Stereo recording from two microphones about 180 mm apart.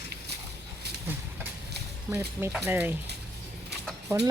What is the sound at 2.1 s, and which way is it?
Speech, 15° right (ahead or behind).